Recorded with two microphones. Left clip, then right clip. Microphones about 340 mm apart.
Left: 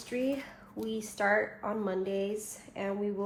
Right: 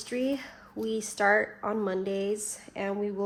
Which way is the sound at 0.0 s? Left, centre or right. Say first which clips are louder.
Right 2 dB; right.